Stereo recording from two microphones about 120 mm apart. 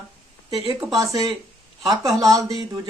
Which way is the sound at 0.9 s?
30° right (ahead or behind).